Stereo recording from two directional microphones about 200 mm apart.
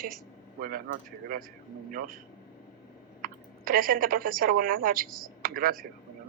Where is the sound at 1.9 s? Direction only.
45° right (ahead or behind).